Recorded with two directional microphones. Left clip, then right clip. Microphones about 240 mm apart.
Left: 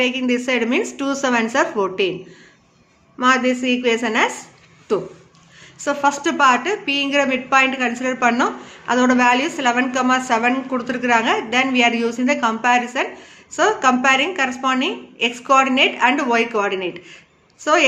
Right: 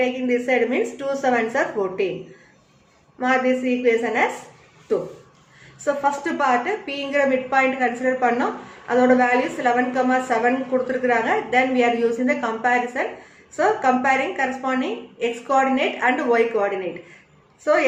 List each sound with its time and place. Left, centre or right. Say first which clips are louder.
0.0 s a woman's voice: left 2 dB; left
3.2 s a woman's voice: left 3 dB; left
5.8 s a woman's voice: left 3 dB; left